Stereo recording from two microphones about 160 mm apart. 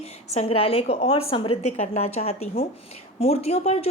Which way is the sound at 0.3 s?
40° left (ahead or behind).